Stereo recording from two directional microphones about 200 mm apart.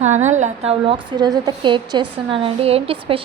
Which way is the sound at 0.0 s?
35° right (ahead or behind).